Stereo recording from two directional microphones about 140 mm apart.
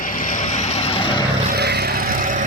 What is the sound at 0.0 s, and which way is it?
Vehicle, 75° left (ahead or behind).